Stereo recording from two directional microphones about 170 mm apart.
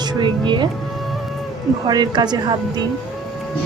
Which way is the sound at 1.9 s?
25° right (ahead or behind).